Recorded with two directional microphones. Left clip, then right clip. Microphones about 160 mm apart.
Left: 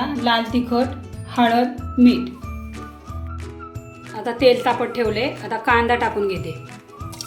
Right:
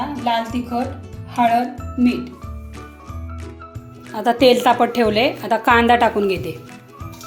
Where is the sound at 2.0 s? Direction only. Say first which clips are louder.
Left 4 dB; centre (ahead or behind).